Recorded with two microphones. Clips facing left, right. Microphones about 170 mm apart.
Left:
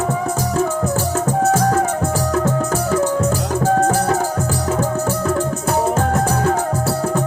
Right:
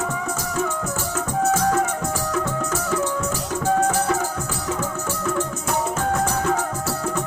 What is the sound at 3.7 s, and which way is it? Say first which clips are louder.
Music: left 3 dB; 35° left (ahead or behind).